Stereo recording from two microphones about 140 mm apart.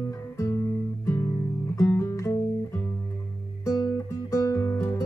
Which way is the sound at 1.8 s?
20° left (ahead or behind).